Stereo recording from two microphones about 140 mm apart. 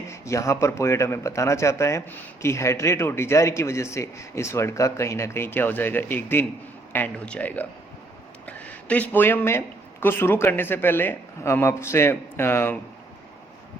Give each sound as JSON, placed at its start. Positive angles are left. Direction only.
{"t": 0.1, "sound": "speech", "side_deg": 20}